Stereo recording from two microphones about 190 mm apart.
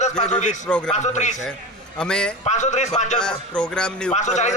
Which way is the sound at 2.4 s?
40° left (ahead or behind).